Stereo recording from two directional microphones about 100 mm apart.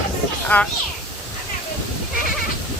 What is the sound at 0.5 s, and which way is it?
Speech, 15° left (ahead or behind).